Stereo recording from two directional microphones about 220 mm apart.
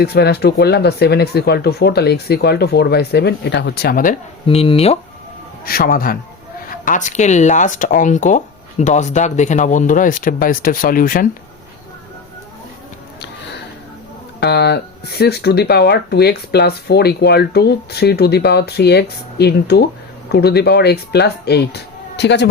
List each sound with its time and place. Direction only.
0.0 s speech: 45° left (ahead or behind)
4.4 s speech: 25° left (ahead or behind)
5.6 s speech: 40° left (ahead or behind)
14.4 s speech: 50° left (ahead or behind)